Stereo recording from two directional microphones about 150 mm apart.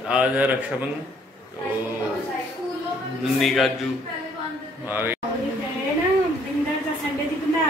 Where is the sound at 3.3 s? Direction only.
Centre (ahead or behind).